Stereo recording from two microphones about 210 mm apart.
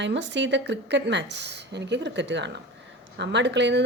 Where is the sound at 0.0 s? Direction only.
55° right (ahead or behind).